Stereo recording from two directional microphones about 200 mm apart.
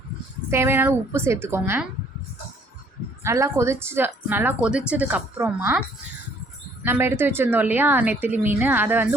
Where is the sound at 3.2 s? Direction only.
15° right (ahead or behind).